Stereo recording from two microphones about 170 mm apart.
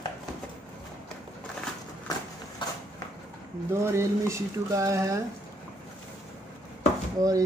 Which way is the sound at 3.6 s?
15° right (ahead or behind).